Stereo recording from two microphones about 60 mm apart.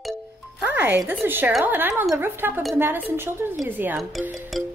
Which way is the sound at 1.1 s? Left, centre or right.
Right.